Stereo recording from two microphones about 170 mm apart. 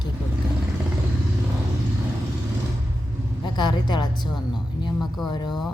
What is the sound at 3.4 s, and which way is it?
A woman's voice, 25° left (ahead or behind).